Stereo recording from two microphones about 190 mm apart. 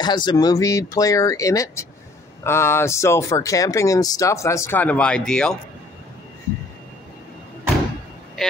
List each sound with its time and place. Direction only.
0.0 s speech: 25° left (ahead or behind); by 5.6 s 5° left (ahead or behind)
8.4 s vehicle: centre (ahead or behind)